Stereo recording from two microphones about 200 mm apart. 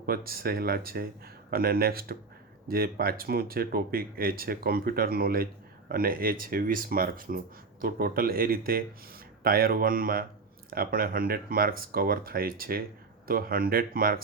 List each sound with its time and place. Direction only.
0.0 s speech: 50° right (ahead or behind)